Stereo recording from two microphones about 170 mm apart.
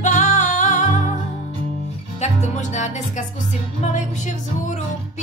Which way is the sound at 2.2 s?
45° left (ahead or behind).